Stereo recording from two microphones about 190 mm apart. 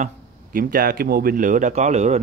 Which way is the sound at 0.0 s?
45° right (ahead or behind).